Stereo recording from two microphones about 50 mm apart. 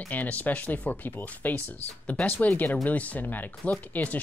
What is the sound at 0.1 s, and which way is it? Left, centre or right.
Speech, left.